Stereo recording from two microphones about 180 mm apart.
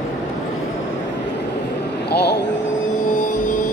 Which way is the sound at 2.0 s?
65° left (ahead or behind).